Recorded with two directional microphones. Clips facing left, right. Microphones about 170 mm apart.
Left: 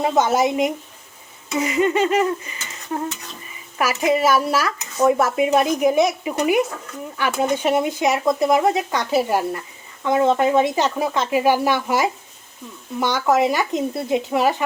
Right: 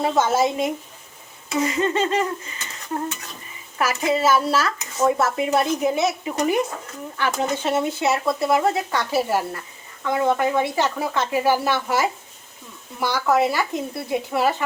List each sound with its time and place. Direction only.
0.0 s speech: 15° left (ahead or behind)
3.8 s speech: 15° left (ahead or behind)